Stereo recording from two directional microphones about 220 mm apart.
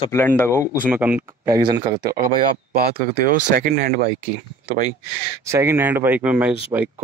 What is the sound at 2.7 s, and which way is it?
Speech, 45° right (ahead or behind).